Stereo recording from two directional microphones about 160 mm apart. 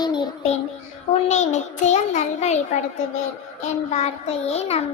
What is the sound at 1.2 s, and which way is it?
A child's voice, 45° left (ahead or behind).